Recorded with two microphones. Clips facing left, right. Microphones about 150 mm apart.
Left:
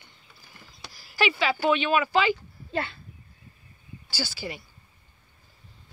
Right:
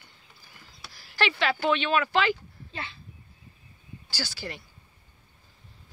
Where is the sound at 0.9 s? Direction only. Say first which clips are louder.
Left 2 dB; 5° left (ahead or behind).